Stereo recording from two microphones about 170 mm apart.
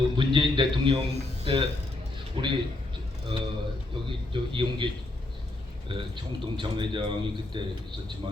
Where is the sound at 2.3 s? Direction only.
30° right (ahead or behind).